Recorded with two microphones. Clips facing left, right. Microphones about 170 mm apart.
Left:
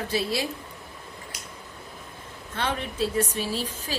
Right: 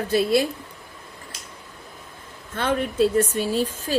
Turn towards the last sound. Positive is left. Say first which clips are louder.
# right 7 dB
turn(degrees=-50)  # may be behind; listen again after turning